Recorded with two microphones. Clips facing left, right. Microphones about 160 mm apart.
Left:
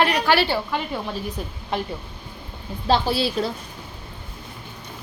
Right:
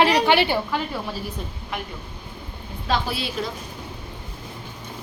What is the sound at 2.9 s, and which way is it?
Speech, 30° left (ahead or behind).